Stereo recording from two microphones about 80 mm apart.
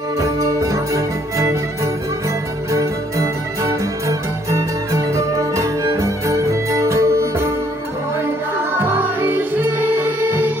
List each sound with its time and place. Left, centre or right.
0.2 s music: right
2.7 s music: right
8.7 s music: right